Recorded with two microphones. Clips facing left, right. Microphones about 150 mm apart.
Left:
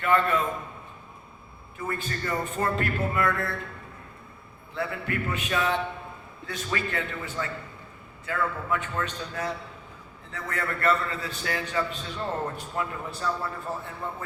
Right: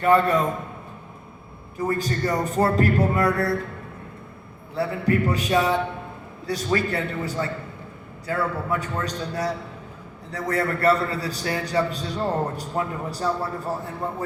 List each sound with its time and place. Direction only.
0.0 s a man's voice: 35° right (ahead or behind)
1.8 s a man's voice: 35° right (ahead or behind)
4.7 s a man's voice: 35° right (ahead or behind)